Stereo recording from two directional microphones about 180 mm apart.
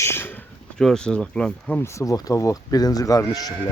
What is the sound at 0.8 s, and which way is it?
Speech, 5° left (ahead or behind).